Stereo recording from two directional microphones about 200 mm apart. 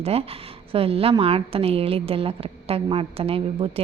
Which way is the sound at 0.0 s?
30° right (ahead or behind).